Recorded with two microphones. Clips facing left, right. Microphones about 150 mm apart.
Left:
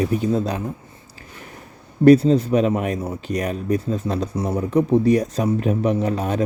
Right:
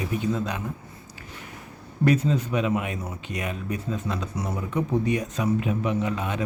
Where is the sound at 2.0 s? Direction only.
35° left (ahead or behind).